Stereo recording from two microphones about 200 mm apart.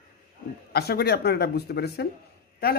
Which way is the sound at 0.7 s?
55° left (ahead or behind).